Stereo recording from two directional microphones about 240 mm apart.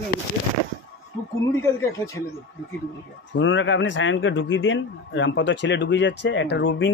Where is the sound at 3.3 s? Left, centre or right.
Left.